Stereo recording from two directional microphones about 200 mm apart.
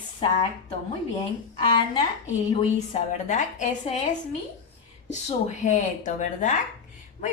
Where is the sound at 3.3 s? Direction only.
35° left (ahead or behind).